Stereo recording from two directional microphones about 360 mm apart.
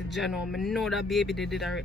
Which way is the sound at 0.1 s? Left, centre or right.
Centre.